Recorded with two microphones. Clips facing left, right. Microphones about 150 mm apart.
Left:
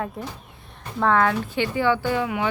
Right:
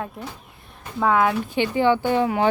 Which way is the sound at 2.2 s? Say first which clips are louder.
Right 5 dB; 35° right (ahead or behind).